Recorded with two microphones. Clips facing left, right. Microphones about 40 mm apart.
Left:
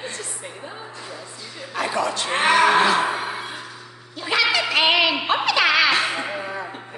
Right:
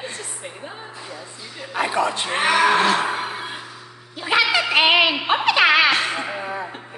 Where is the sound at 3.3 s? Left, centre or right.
Centre.